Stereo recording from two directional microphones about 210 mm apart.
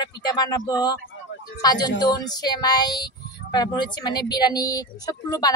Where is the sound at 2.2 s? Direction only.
20° left (ahead or behind).